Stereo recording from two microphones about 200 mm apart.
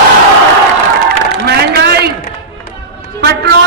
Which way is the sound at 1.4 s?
55° right (ahead or behind).